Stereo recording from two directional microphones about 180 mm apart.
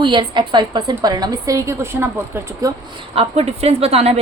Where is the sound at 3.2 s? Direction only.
35° right (ahead or behind).